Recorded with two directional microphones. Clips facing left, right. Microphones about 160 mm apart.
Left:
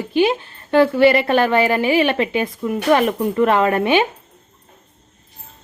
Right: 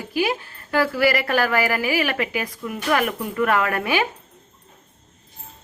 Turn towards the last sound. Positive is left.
turn(degrees=25)  # may be behind; listen again after turning